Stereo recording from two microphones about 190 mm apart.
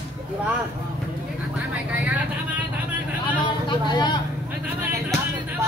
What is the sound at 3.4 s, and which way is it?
Vehicle, 25° left (ahead or behind).